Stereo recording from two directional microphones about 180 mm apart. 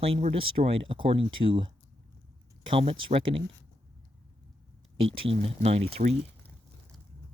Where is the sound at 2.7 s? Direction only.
30° right (ahead or behind).